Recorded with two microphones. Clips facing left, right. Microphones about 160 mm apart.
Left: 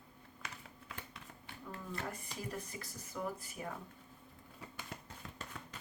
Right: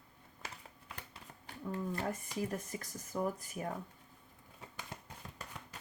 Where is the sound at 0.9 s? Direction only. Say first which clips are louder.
Left 1 dB; 40° right (ahead or behind).